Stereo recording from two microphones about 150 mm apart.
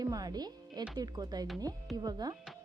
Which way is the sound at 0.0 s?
25° right (ahead or behind).